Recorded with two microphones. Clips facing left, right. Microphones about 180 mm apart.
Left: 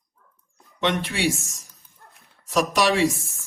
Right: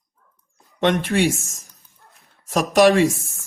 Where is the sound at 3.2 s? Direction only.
60° right (ahead or behind).